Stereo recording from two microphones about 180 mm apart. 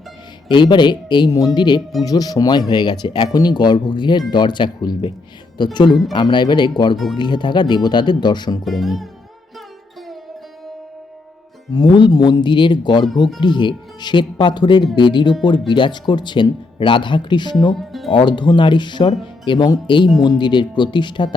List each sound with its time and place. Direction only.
0.4 s speech: 25° left (ahead or behind)
6.9 s speech: centre (ahead or behind)
7.2 s speech: 25° left (ahead or behind)
8.6 s speech: centre (ahead or behind)
11.7 s speech: 25° left (ahead or behind)
17.7 s speech: centre (ahead or behind)
18.1 s speech: 25° left (ahead or behind)